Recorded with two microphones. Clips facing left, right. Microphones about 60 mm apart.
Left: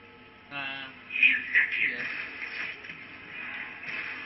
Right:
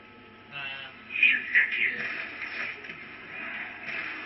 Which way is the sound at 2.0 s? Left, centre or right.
Right.